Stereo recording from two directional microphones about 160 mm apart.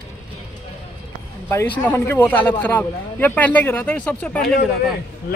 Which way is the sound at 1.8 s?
15° left (ahead or behind).